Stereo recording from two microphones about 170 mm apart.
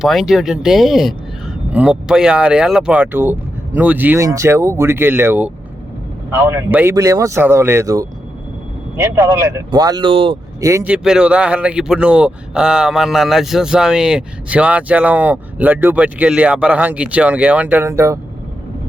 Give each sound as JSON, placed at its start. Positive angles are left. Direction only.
{"t": 0.0, "sound": "speech", "side_deg": 0}
{"t": 10.6, "sound": "speech", "side_deg": -15}
{"t": 10.9, "sound": "speech", "side_deg": -5}